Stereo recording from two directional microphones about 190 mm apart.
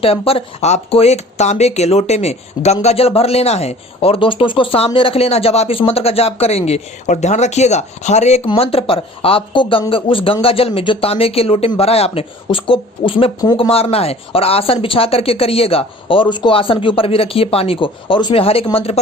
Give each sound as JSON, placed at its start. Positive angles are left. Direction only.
{"t": 0.0, "sound": "speech", "side_deg": 30}